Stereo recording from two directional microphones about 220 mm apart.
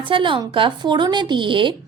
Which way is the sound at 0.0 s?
20° right (ahead or behind).